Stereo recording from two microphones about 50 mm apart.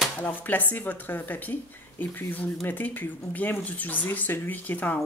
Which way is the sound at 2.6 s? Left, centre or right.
Left.